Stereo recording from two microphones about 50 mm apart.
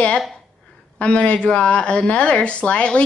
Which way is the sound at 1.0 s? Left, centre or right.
Left.